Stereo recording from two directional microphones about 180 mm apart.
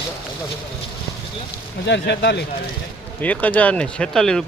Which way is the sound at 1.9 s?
75° left (ahead or behind).